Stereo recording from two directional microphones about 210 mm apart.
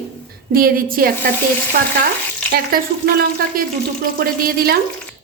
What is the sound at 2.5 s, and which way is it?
A woman's voice, 45° right (ahead or behind).